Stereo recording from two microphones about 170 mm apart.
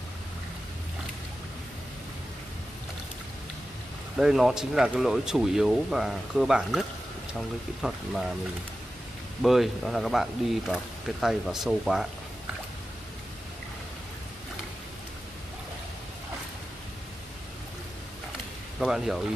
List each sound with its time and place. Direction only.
4.2 s speech: centre (ahead or behind)
9.4 s speech: centre (ahead or behind)
18.8 s speech: centre (ahead or behind)